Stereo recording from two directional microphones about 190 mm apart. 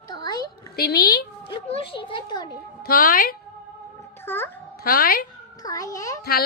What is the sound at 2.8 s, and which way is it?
Speech, 50° left (ahead or behind).